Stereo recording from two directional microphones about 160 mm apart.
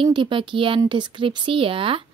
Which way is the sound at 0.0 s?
30° right (ahead or behind).